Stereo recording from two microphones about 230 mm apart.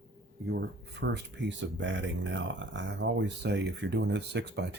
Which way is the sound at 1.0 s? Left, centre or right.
Right.